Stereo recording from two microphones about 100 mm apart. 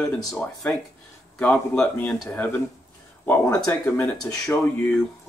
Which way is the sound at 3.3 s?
25° left (ahead or behind).